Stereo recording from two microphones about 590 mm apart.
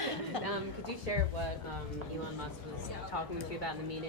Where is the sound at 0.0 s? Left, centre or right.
Left.